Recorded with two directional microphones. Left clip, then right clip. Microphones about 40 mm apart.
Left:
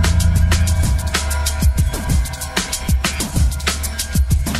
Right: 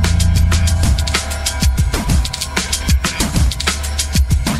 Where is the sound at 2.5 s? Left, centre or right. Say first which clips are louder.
Right 1 dB; left.